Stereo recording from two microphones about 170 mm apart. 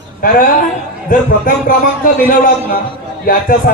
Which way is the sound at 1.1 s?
55° left (ahead or behind).